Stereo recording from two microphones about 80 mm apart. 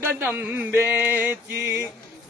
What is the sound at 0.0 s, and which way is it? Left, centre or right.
Male singing, right.